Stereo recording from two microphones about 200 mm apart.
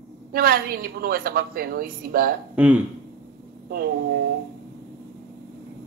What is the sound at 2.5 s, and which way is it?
Speech, 10° right (ahead or behind).